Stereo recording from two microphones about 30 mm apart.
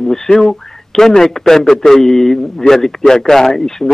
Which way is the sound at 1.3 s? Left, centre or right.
Centre.